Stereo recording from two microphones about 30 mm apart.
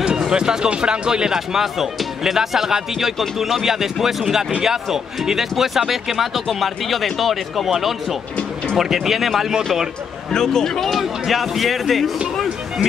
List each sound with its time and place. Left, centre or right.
0.3 s speech: right; by 9.5 s centre
10.3 s speech: centre
10.8 s speech: centre